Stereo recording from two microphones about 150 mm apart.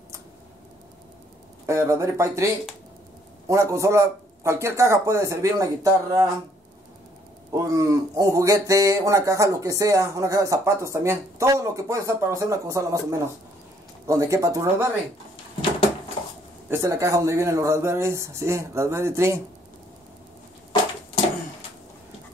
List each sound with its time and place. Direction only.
1.7 s speech: 20° right (ahead or behind)
7.5 s speech: 20° right (ahead or behind)
16.6 s speech: 15° right (ahead or behind)